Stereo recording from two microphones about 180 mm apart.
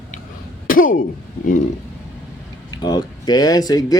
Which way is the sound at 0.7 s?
50° left (ahead or behind).